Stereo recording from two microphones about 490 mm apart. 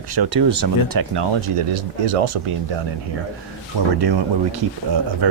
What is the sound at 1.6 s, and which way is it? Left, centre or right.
Speech, right.